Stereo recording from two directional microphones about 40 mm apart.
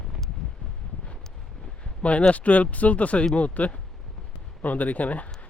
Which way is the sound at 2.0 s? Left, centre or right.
Left.